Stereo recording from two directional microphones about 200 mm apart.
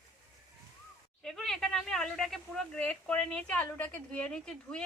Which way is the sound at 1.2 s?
5° left (ahead or behind).